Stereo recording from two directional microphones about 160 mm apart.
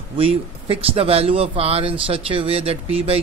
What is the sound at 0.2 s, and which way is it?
Speech, 35° right (ahead or behind).